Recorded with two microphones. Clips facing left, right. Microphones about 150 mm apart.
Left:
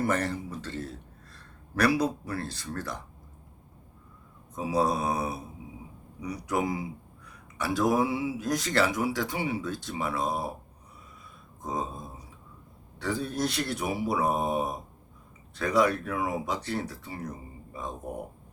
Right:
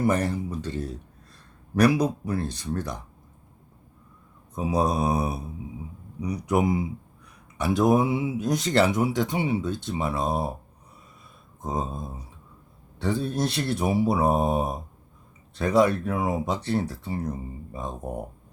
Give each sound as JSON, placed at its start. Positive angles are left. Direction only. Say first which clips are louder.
{"t": 0.0, "sound": "speech", "louder": "right 4 dB", "side_deg": -15}
{"t": 4.5, "sound": "speech", "louder": "right 2 dB", "side_deg": -20}
{"t": 13.0, "sound": "speech", "louder": "right 4 dB", "side_deg": -25}